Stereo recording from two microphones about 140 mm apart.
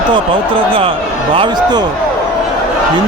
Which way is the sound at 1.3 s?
35° right (ahead or behind).